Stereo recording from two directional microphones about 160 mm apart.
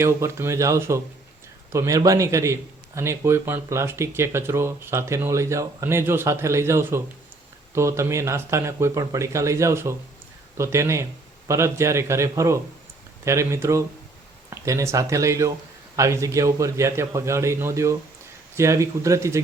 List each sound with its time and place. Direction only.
0.0 s a man's voice: 15° right (ahead or behind)